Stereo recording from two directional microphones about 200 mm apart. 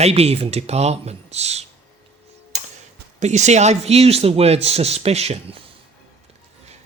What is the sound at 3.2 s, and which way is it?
Speech, 35° right (ahead or behind).